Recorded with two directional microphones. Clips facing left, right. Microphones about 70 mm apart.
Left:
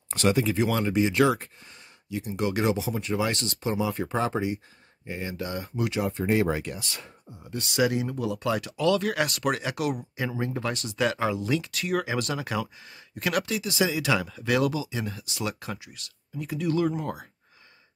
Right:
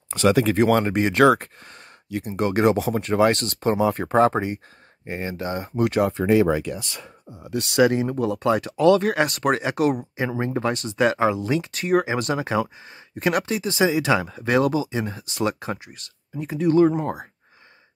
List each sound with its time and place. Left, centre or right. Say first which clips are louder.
0.3 s speech: right 5 dB; right
0.6 s speech: right 5 dB; right
7.4 s speech: right 7 dB; right
7.8 s speech: right 6 dB; right